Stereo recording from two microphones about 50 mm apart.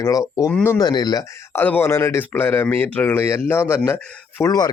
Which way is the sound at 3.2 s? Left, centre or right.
Left.